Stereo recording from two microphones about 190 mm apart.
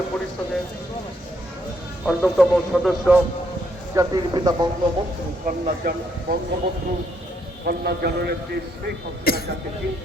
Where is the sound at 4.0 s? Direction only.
20° right (ahead or behind).